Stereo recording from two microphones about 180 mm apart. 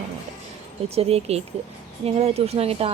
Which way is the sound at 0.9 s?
35° right (ahead or behind).